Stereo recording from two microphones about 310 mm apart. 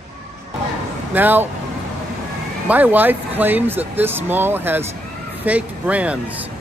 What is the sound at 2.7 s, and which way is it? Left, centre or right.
Speech, centre.